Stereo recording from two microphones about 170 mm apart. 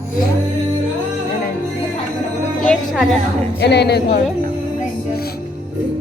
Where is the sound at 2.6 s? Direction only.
Centre (ahead or behind).